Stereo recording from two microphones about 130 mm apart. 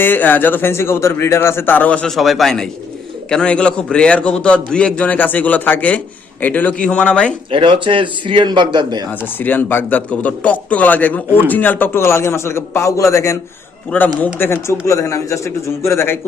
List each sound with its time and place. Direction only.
0.0 s a man's voice: 15° left (ahead or behind)
7.5 s a man's voice: 40° right (ahead or behind)
9.2 s a man's voice: 15° left (ahead or behind)